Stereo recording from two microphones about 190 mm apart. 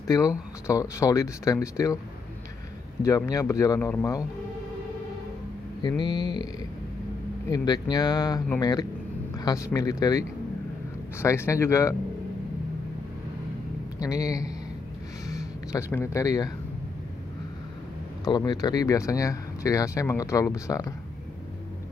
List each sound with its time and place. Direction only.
0.0 s speech: 15° left (ahead or behind)
3.0 s speech: 15° left (ahead or behind)
5.8 s speech: 25° left (ahead or behind)
7.4 s speech: 20° left (ahead or behind)
13.9 s speech: 20° left (ahead or behind)
18.2 s speech: 20° left (ahead or behind)